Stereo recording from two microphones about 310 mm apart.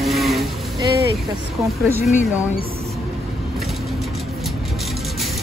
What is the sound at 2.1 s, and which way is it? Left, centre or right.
Speech, left.